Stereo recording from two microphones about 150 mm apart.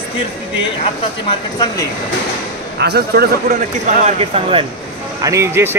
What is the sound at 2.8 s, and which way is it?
Speech, 90° right.